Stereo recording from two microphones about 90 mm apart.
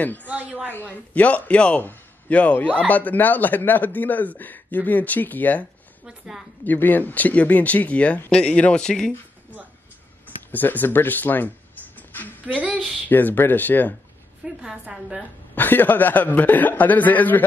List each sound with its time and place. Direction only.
0.0 s speech: 20° left (ahead or behind)
0.3 s a woman's voice: 15° right (ahead or behind)
0.7 s speech: 20° left (ahead or behind)
6.0 s a woman's voice: 5° right (ahead or behind)
6.6 s speech: 20° left (ahead or behind)
10.5 s speech: 20° left (ahead or behind)
12.4 s a woman's voice: 15° right (ahead or behind)
13.1 s speech: 20° left (ahead or behind)
14.4 s a woman's voice: 10° right (ahead or behind)
15.5 s speech: 20° left (ahead or behind)